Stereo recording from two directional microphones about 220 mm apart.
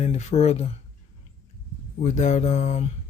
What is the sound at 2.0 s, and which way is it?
Speech, 30° left (ahead or behind).